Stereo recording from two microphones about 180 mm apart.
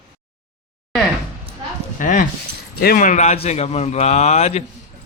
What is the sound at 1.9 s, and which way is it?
Dog, 45° left (ahead or behind).